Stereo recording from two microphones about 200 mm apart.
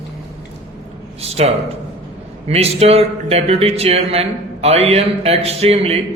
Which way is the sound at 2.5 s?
30° right (ahead or behind).